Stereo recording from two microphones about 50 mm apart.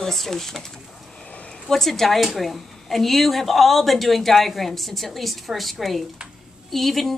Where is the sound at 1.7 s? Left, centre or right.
Centre.